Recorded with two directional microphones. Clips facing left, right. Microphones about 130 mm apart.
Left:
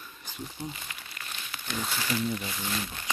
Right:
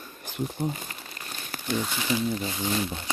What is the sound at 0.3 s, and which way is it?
Speech, 65° right (ahead or behind).